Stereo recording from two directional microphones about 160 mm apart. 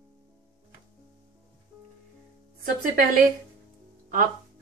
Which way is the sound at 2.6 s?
60° right (ahead or behind).